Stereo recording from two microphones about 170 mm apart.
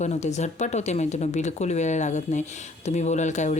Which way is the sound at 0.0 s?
40° left (ahead or behind).